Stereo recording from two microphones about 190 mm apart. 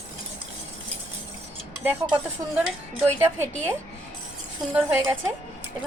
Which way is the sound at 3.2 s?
15° right (ahead or behind).